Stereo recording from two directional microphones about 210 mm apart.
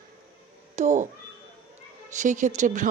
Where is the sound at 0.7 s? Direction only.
35° right (ahead or behind).